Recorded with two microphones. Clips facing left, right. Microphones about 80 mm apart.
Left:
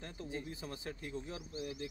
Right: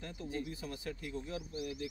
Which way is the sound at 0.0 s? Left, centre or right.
Left.